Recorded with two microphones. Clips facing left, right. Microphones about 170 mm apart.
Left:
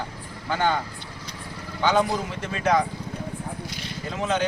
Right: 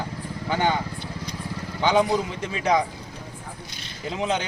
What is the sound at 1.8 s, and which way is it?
Speech, 15° right (ahead or behind).